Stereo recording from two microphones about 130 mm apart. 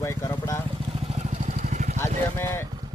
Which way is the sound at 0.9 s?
50° right (ahead or behind).